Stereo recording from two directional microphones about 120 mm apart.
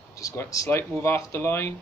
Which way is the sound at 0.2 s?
30° left (ahead or behind).